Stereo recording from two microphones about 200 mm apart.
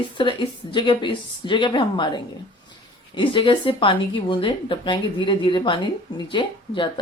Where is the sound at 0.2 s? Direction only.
25° left (ahead or behind).